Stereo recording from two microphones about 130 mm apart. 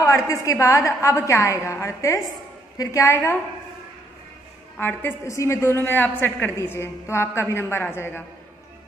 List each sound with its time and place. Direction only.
0.0 s a woman's voice: 25° left (ahead or behind)
4.7 s a woman's voice: 15° left (ahead or behind)